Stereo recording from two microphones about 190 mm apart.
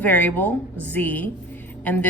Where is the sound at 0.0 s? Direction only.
10° left (ahead or behind).